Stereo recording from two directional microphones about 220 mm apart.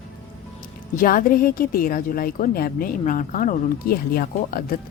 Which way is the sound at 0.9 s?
40° left (ahead or behind).